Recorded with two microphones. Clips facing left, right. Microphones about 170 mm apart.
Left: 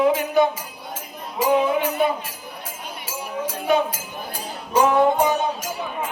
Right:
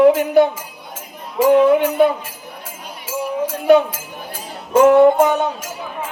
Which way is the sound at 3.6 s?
70° right (ahead or behind).